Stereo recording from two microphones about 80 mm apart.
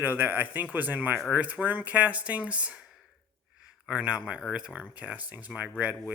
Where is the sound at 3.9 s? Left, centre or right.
Centre.